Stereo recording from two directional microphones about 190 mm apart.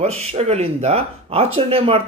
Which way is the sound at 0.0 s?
35° right (ahead or behind).